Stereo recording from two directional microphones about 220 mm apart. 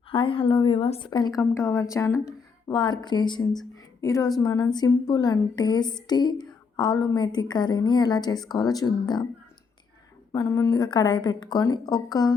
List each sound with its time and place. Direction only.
0.1 s a woman's voice: 25° left (ahead or behind)
10.3 s a woman's voice: 15° left (ahead or behind)